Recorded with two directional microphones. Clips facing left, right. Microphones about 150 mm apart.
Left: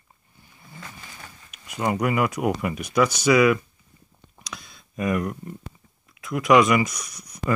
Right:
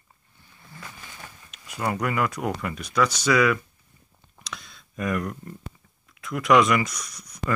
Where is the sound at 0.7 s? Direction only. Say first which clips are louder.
Left 1 dB; 15° left (ahead or behind).